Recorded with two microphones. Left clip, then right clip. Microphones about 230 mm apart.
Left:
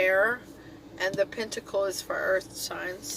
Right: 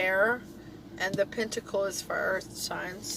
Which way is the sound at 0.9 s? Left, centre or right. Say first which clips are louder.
Left 1 dB; left.